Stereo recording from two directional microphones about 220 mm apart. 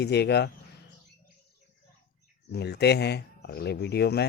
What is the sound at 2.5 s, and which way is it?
Speech, 50° left (ahead or behind).